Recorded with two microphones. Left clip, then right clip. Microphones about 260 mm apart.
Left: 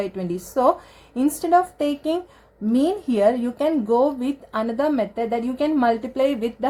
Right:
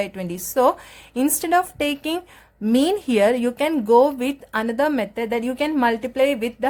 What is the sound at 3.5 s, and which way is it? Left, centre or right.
A woman's voice, right.